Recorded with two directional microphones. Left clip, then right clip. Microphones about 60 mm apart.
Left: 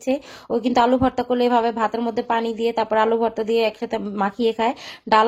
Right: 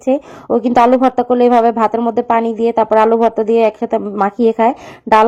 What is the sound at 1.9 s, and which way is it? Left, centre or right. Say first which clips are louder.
A woman's voice: right 8 dB; centre.